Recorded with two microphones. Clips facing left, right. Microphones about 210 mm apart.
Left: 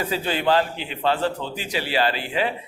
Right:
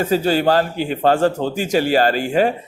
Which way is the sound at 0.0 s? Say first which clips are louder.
Right 7 dB; 45° right (ahead or behind).